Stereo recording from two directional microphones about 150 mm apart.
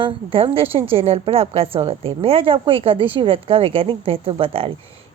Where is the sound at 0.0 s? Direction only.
35° right (ahead or behind).